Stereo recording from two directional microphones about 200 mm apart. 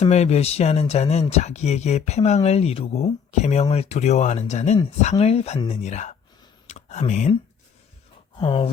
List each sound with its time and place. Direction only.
0.0 s speech: 35° left (ahead or behind)
8.4 s speech: 25° left (ahead or behind)